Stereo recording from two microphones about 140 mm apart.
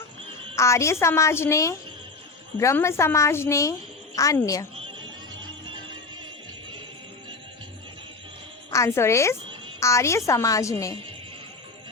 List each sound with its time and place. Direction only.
0.5 s a woman's voice: 20° left (ahead or behind)
8.7 s a woman's voice: 20° left (ahead or behind)